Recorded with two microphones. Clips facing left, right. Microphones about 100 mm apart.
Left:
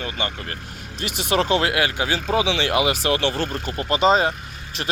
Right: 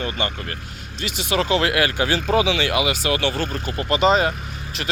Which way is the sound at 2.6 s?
40° left (ahead or behind).